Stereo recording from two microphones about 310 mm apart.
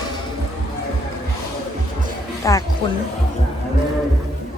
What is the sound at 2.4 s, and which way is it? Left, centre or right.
Music, centre.